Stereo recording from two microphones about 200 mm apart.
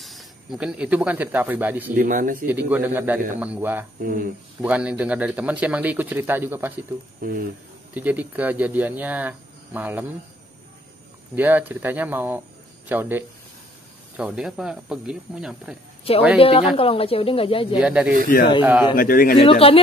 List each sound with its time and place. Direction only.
0.0 s speech: centre (ahead or behind)
2.0 s speech: 40° right (ahead or behind)
2.4 s speech: 10° right (ahead or behind)
4.0 s speech: 45° right (ahead or behind)
4.6 s speech: 5° right (ahead or behind)
7.2 s speech: 45° right (ahead or behind)
7.9 s speech: 10° right (ahead or behind)
11.3 s speech: 10° right (ahead or behind)
16.3 s speech: 30° left (ahead or behind)
17.7 s speech: 5° right (ahead or behind)
18.9 s speech: 45° left (ahead or behind)
19.4 s speech: 30° left (ahead or behind)